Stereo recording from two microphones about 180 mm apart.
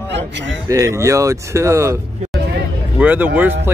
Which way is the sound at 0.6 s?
15° right (ahead or behind).